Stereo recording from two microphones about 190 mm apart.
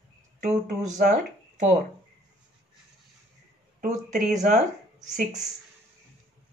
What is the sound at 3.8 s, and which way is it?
Speech, 40° right (ahead or behind).